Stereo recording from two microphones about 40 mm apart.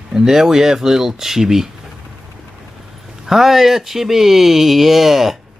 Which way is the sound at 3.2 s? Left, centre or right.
Centre.